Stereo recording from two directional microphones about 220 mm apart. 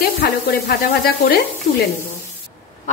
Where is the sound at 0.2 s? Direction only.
45° left (ahead or behind).